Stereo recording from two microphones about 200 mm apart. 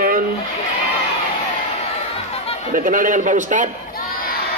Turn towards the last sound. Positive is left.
turn(degrees=-40)  # may be behind; listen again after turning